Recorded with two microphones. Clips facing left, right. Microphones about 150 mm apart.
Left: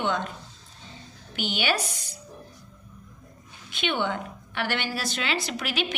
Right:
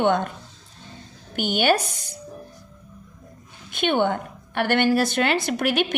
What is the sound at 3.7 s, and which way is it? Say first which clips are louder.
A woman's voice: right 6 dB; 50° right (ahead or behind).